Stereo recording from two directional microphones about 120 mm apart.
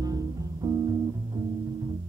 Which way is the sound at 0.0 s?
30° right (ahead or behind).